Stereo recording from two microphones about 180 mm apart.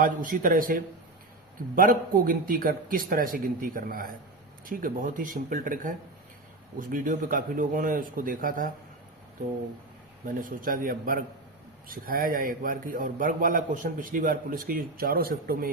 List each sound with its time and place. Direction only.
0.0 s a man's voice: 50° right (ahead or behind)
10.2 s a man's voice: 50° right (ahead or behind)